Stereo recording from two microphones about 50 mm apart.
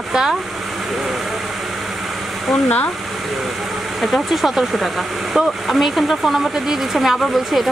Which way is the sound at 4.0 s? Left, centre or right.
Centre.